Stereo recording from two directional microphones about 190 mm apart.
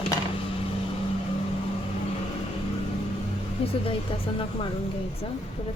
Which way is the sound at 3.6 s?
30° left (ahead or behind).